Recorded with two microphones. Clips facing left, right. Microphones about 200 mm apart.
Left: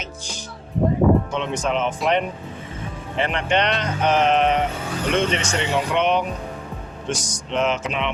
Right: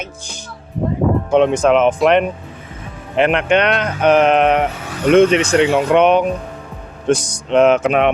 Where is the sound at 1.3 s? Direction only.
55° right (ahead or behind).